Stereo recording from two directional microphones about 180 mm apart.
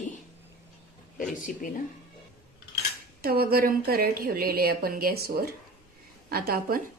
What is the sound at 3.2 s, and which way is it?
A woman's voice, 55° right (ahead or behind).